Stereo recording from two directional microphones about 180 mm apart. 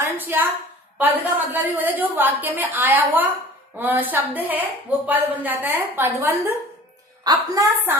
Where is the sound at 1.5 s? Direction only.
10° right (ahead or behind).